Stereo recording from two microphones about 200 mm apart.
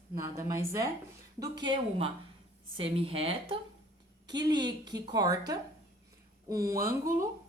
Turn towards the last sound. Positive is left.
turn(degrees=-15)  # may be behind; listen again after turning